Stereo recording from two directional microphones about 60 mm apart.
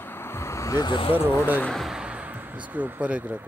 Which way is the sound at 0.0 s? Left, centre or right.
Left.